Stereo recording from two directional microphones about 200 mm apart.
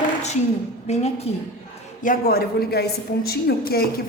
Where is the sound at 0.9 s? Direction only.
30° left (ahead or behind).